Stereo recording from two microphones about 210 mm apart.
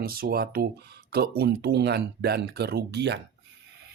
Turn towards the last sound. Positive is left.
turn(degrees=-55)  # may be behind; listen again after turning